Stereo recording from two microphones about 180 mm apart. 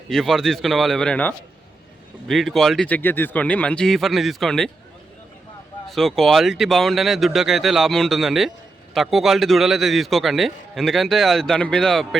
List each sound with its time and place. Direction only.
0.1 s a man's voice: centre (ahead or behind)
5.9 s a man's voice: centre (ahead or behind)